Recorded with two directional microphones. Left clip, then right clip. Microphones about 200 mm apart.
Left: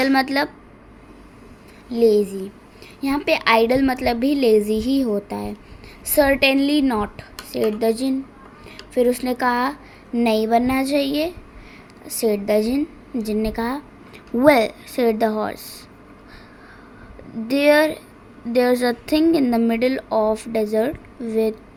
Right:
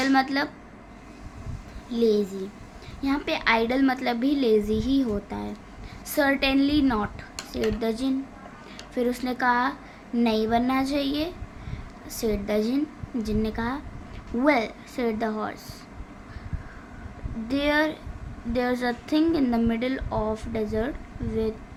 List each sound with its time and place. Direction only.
0.0 s a woman's voice: 25° left (ahead or behind)
2.0 s a woman's voice: 20° left (ahead or behind)
17.5 s a woman's voice: 20° left (ahead or behind)